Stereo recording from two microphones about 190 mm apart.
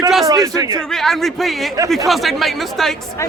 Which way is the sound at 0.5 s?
20° right (ahead or behind).